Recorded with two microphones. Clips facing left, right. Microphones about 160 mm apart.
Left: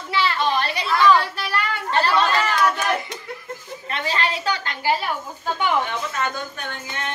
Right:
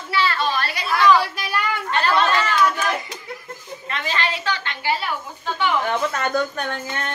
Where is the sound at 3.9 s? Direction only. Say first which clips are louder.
Left 1 dB; 35° left (ahead or behind).